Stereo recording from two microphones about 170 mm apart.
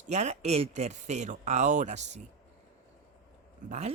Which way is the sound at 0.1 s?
40° right (ahead or behind).